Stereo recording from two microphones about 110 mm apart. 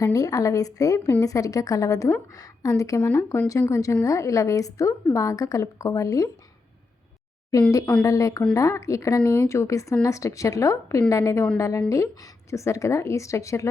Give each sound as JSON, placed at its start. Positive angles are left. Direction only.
{"t": 0.0, "sound": "a woman's voice", "side_deg": 30}
{"t": 8.0, "sound": "a woman's voice", "side_deg": 30}